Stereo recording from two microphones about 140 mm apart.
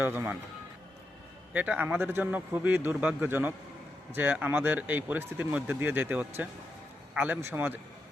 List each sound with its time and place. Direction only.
0.0 s speech: 15° right (ahead or behind)
1.5 s speech: 10° right (ahead or behind)